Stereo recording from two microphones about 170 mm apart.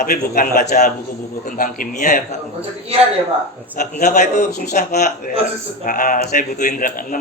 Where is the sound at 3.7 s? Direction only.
45° left (ahead or behind).